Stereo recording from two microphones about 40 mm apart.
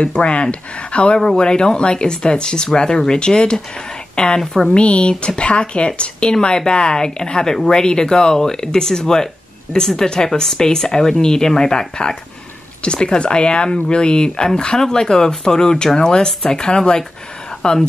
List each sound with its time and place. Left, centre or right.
0.0 s speech: left
4.1 s a sound: left
4.6 s speech: left